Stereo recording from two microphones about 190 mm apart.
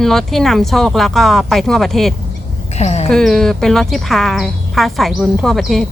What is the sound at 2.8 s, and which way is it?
Speech, 35° left (ahead or behind).